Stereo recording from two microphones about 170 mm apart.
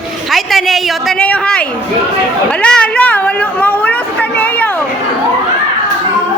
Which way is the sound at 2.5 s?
5° left (ahead or behind).